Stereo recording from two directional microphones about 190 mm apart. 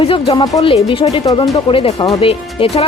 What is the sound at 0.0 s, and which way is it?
Speech, 30° left (ahead or behind).